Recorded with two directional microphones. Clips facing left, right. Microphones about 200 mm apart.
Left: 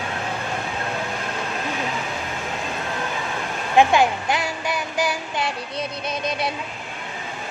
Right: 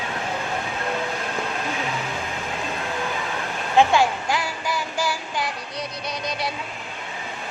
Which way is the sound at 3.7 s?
20° left (ahead or behind).